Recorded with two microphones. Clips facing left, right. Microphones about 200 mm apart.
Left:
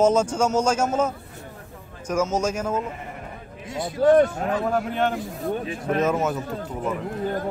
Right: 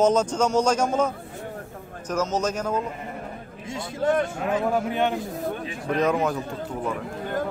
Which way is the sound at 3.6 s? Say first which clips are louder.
Left 5 dB; 25° right (ahead or behind).